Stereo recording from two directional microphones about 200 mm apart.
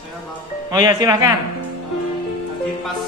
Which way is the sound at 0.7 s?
20° right (ahead or behind).